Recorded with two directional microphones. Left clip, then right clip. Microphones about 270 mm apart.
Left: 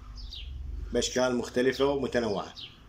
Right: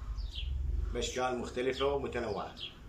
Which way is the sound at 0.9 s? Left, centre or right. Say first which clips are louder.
Left 7 dB; left.